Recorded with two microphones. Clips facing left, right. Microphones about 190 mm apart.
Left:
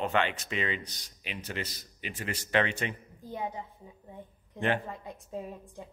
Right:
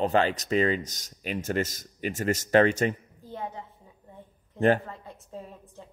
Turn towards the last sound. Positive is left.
turn(degrees=15)  # may be behind; listen again after turning